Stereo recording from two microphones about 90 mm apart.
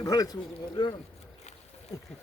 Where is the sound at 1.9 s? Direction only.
40° left (ahead or behind).